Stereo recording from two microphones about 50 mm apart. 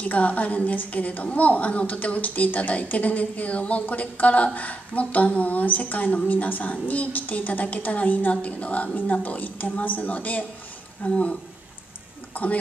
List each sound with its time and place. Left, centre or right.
0.0 s a woman's voice: left